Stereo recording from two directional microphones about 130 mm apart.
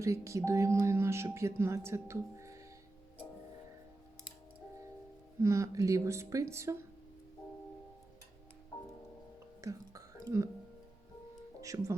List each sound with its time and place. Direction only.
0.0 s speech: 25° right (ahead or behind)
5.4 s speech: 20° right (ahead or behind)
9.6 s whispering: 25° right (ahead or behind)
11.6 s speech: 25° right (ahead or behind)